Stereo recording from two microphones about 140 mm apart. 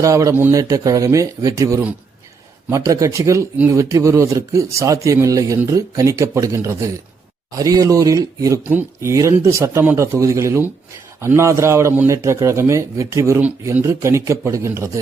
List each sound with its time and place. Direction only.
0.0 s speech: 20° right (ahead or behind)